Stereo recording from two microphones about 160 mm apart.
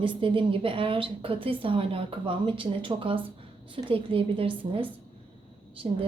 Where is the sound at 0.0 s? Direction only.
30° right (ahead or behind).